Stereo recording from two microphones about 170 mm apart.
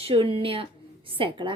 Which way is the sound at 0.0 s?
35° right (ahead or behind).